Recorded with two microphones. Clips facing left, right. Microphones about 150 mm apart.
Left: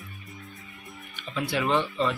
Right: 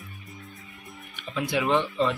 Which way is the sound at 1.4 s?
15° right (ahead or behind).